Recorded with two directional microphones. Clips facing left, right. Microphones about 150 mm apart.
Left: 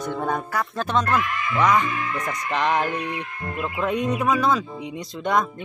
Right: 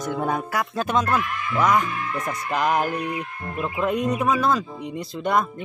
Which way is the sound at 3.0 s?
85° left.